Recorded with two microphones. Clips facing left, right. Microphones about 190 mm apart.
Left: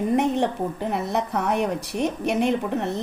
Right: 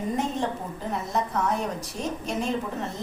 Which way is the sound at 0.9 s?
65° left (ahead or behind).